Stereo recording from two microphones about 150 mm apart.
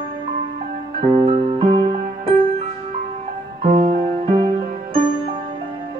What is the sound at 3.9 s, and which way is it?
Music, 60° right (ahead or behind).